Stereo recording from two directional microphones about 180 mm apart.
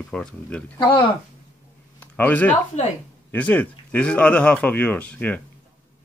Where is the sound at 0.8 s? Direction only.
25° left (ahead or behind).